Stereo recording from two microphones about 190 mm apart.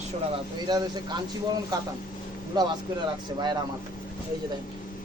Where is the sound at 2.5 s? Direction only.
20° right (ahead or behind).